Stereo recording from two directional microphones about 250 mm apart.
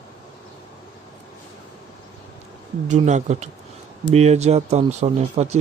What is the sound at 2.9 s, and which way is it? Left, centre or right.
Speech, right.